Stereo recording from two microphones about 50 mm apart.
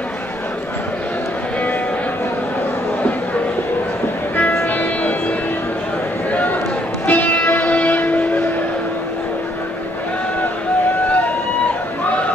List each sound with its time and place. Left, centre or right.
4.6 s music: left
7.1 s music: left